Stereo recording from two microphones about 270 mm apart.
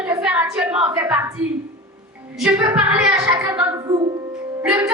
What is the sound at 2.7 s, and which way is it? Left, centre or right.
Speech, centre.